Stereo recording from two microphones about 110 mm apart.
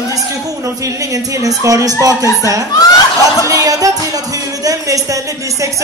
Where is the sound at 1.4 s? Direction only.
30° right (ahead or behind).